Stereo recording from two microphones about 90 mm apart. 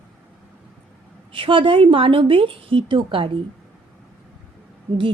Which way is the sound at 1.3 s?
70° right (ahead or behind).